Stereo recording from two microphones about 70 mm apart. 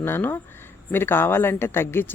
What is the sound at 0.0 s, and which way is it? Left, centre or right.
Speech, left.